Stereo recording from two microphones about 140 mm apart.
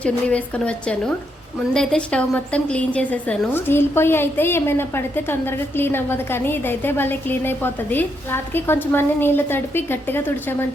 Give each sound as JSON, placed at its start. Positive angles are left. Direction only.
{"t": 0.0, "sound": "a woman's voice", "side_deg": 10}